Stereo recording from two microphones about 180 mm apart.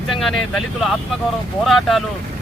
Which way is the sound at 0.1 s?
Centre (ahead or behind).